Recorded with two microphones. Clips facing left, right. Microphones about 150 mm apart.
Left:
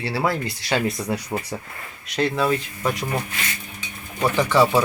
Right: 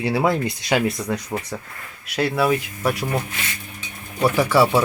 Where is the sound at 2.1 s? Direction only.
5° right (ahead or behind).